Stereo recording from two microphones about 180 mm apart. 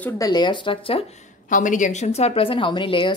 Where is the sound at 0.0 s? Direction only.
20° left (ahead or behind).